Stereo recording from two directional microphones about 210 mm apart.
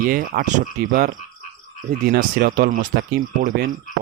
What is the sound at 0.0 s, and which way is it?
Speech, 40° right (ahead or behind).